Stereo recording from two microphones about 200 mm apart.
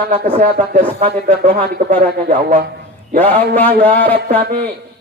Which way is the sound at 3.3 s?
10° left (ahead or behind).